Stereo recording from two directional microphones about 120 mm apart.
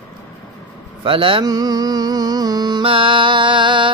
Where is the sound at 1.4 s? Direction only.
30° right (ahead or behind).